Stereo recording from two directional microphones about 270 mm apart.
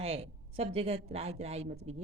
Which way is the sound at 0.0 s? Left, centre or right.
Right.